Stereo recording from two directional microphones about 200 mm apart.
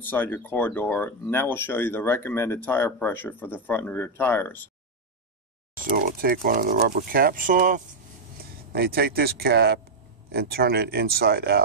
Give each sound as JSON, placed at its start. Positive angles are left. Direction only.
{"t": 0.0, "sound": "speech", "side_deg": 10}
{"t": 5.9, "sound": "speech", "side_deg": -45}